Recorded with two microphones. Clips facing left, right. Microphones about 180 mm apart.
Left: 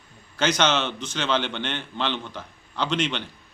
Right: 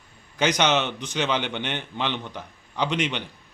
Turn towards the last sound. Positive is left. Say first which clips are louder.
# even
turn(degrees=-15)  # may be behind; listen again after turning